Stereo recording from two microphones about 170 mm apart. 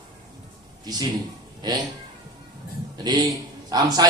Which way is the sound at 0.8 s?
25° right (ahead or behind).